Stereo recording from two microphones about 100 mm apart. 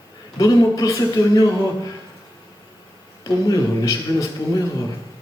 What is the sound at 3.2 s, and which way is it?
A man's voice, 40° left (ahead or behind).